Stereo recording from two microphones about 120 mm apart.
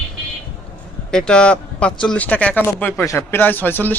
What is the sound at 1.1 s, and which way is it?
Speech, 5° left (ahead or behind).